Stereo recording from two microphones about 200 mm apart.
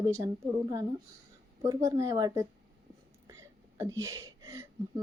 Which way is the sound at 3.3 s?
15° right (ahead or behind).